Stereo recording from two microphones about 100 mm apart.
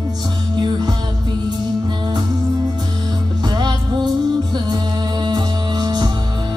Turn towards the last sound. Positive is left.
turn(degrees=-45)  # may be behind; listen again after turning